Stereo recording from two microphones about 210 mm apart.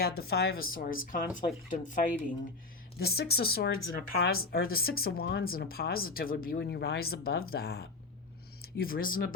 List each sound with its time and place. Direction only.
0.2 s speech: 50° left (ahead or behind)